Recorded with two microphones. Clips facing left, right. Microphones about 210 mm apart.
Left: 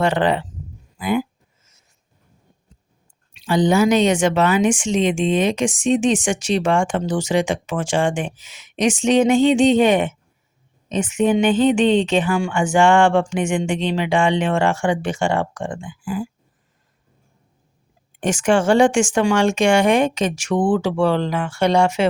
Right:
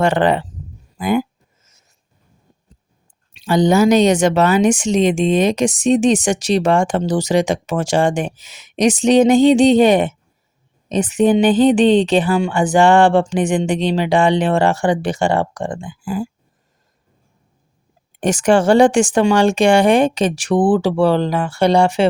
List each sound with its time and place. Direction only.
0.0 s speech: 45° right (ahead or behind)
0.9 s a sound: 45° right (ahead or behind)
3.3 s a woman's voice: 40° right (ahead or behind)
18.2 s a woman's voice: 40° right (ahead or behind)